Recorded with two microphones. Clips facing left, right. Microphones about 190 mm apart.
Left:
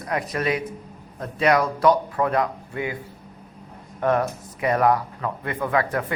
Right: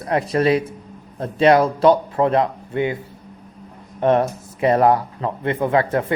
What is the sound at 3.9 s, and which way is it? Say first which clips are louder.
A man's voice: right 5 dB; 25° right (ahead or behind).